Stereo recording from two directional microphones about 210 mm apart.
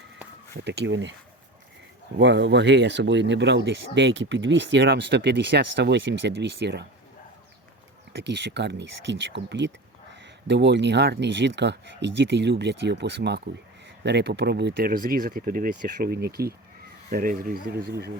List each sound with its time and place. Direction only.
0.5 s speech: 55° right (ahead or behind)
2.1 s speech: 55° right (ahead or behind)
8.1 s speech: 55° right (ahead or behind)